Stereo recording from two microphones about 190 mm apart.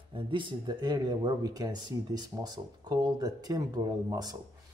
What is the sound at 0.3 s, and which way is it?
Speech, 25° right (ahead or behind).